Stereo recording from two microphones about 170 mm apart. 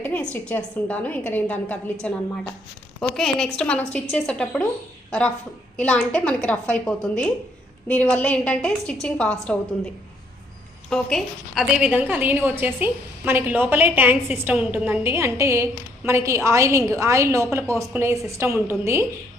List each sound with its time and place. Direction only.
0.0 s a sound: 10° left (ahead or behind)
0.3 s a woman's voice: 10° left (ahead or behind)
5.7 s a woman's voice: 5° left (ahead or behind); by 19.0 s 15° right (ahead or behind)